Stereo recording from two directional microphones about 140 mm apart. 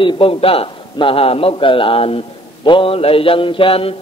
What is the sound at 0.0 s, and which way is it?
A man's voice, 40° left (ahead or behind).